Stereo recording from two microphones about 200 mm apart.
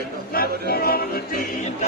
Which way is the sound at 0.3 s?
50° left (ahead or behind).